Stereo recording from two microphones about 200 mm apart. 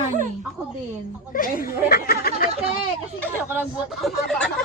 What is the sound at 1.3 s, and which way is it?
Speech, 45° left (ahead or behind).